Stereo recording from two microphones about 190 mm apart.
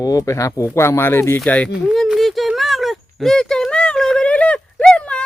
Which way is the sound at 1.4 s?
5° left (ahead or behind).